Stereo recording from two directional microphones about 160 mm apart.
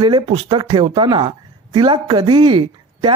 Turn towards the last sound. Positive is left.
turn(degrees=-30)  # may be behind; listen again after turning